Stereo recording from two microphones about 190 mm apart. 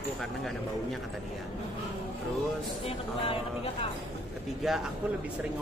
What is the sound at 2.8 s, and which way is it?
Speech, 30° left (ahead or behind).